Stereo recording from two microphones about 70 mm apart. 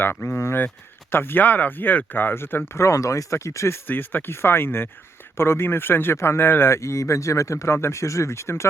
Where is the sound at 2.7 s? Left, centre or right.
Left.